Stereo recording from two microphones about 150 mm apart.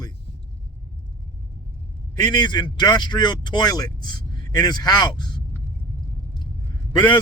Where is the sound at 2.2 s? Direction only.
30° left (ahead or behind).